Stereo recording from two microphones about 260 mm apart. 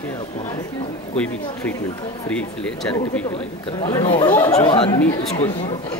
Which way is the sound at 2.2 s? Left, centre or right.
Centre.